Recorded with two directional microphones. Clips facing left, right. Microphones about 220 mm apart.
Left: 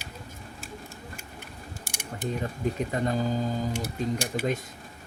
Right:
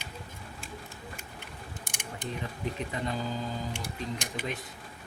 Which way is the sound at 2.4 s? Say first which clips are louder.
Left 6 dB; 45° left (ahead or behind).